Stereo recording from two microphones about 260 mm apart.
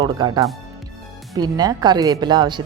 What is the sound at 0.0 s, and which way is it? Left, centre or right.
A woman's voice, centre.